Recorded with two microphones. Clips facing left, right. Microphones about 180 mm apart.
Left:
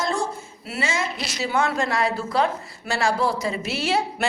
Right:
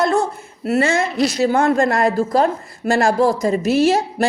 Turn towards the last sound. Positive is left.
turn(degrees=-45)  # may be behind; listen again after turning